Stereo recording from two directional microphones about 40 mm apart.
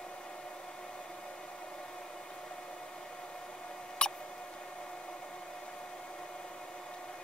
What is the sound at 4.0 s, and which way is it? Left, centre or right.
Mouse, left.